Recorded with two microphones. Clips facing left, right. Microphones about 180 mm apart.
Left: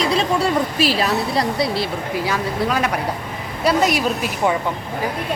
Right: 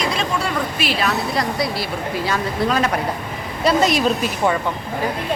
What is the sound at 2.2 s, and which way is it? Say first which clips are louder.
Speech: right 1 dB; 10° left (ahead or behind).